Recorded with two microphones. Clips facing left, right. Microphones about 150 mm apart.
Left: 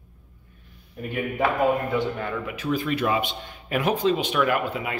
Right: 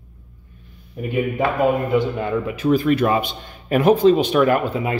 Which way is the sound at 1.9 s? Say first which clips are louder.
Right 6 dB; 20° right (ahead or behind).